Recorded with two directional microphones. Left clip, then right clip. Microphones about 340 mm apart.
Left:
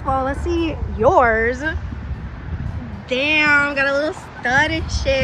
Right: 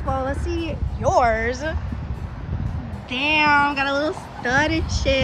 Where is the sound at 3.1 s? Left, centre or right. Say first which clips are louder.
Left 2 dB; centre.